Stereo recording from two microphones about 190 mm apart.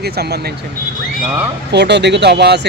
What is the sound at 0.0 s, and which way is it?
Speech, 55° right (ahead or behind).